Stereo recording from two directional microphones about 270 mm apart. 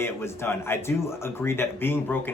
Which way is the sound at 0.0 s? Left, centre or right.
Centre.